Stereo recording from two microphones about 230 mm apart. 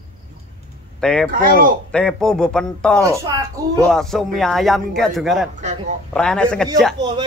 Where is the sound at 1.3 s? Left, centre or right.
Right.